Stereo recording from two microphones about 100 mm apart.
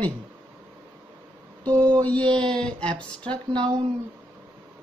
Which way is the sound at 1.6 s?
15° left (ahead or behind).